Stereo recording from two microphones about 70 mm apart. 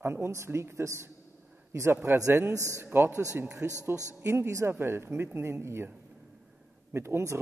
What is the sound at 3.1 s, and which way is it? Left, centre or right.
A man's voice, right.